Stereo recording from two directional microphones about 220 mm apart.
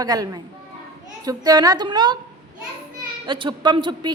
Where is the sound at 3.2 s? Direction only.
20° right (ahead or behind).